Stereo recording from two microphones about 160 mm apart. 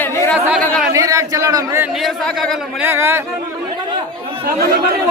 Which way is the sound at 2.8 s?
15° right (ahead or behind).